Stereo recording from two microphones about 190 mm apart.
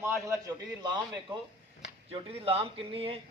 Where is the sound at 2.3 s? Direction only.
30° right (ahead or behind).